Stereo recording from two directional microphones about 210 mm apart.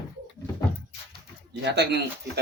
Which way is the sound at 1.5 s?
55° right (ahead or behind).